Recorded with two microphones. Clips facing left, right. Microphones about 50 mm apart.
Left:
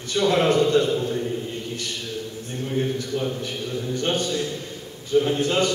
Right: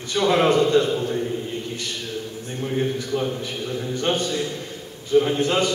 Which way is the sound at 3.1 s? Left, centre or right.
Right.